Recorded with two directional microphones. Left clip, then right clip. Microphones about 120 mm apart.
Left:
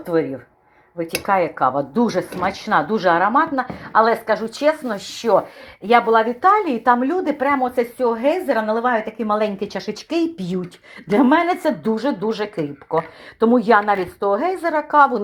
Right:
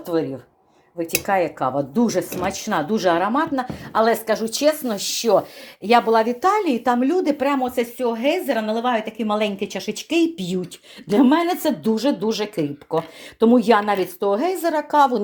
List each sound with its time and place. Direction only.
0.0 s a woman's voice: 5° right (ahead or behind)
1.2 s speech: 20° right (ahead or behind)
7.9 s a woman's voice: 5° right (ahead or behind); by 10.7 s 30° right (ahead or behind)
11.1 s speech: 15° right (ahead or behind); by 15.2 s 35° right (ahead or behind)